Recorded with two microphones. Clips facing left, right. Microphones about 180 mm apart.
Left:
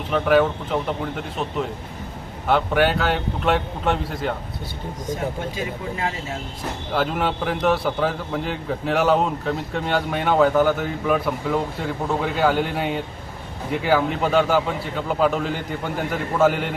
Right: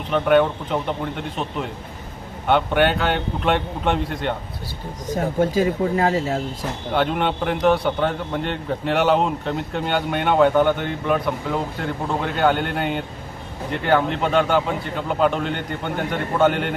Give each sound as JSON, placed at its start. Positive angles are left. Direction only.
{"t": 0.1, "sound": "a man's voice", "side_deg": 0}
{"t": 2.5, "sound": "a man's voice", "side_deg": 0}
{"t": 5.4, "sound": "speech", "side_deg": -40}
{"t": 6.9, "sound": "a man's voice", "side_deg": 0}